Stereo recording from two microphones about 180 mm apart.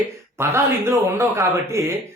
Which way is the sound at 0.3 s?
15° right (ahead or behind).